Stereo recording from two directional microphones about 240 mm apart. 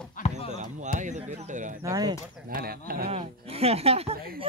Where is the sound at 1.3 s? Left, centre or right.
Right.